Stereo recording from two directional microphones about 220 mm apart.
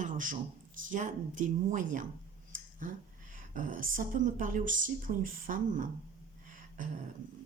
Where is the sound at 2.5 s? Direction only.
35° right (ahead or behind).